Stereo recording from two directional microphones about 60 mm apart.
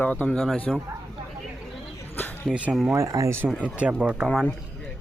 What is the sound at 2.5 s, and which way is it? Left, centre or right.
Speech, centre.